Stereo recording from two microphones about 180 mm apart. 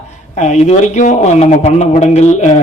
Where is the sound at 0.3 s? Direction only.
40° left (ahead or behind).